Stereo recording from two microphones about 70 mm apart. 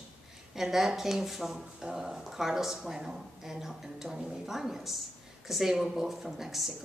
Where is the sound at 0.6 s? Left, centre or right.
Centre.